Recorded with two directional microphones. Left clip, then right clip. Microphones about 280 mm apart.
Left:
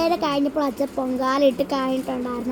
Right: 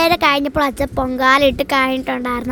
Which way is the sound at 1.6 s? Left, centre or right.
Right.